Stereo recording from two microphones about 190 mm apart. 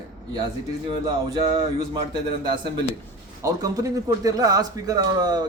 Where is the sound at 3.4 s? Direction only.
20° right (ahead or behind).